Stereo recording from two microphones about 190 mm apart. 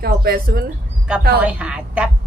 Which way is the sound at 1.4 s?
5° right (ahead or behind).